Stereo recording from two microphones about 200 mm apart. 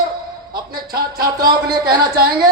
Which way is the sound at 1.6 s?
50° right (ahead or behind).